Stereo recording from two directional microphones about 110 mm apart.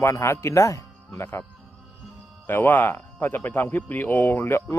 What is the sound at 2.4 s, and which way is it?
Speech, 20° left (ahead or behind).